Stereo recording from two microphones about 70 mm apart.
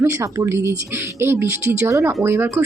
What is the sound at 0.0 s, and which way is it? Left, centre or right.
Speech, right.